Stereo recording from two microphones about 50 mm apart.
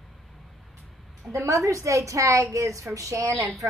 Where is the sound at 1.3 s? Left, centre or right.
Right.